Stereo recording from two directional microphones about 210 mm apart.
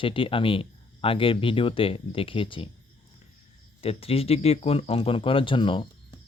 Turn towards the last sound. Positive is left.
turn(degrees=25)  # may be behind; listen again after turning